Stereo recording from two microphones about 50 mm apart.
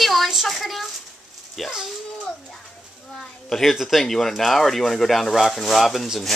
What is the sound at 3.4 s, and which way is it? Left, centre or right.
Speech, centre.